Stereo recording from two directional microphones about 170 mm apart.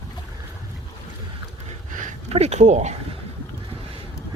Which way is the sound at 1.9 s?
45° right (ahead or behind).